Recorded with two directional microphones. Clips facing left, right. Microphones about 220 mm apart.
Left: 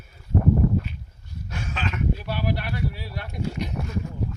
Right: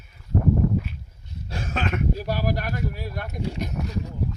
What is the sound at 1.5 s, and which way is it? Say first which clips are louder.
Speech: right 4 dB; 40° right (ahead or behind).